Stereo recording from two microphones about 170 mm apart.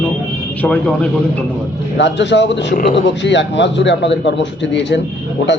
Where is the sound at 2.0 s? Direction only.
90° left.